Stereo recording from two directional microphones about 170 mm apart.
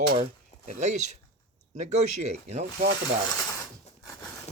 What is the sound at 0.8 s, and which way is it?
Speech, 45° right (ahead or behind).